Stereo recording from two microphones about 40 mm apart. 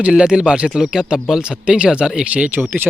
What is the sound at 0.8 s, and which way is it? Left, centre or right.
Speech, centre.